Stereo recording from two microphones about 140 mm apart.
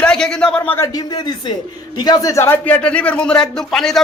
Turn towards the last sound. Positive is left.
turn(degrees=5)  # may be behind; listen again after turning